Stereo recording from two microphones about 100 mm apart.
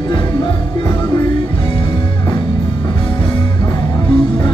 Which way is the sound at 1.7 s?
50° left (ahead or behind).